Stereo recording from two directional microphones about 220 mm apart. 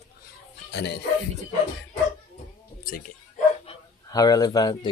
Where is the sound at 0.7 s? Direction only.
50° left (ahead or behind).